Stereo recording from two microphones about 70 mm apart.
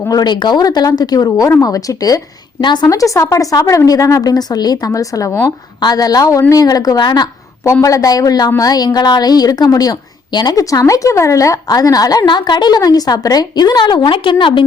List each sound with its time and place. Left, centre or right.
0.1 s a woman's voice: left
2.9 s a woman's voice: left
4.9 s speech: left
5.8 s a woman's voice: left
7.6 s a woman's voice: left
10.6 s a woman's voice: left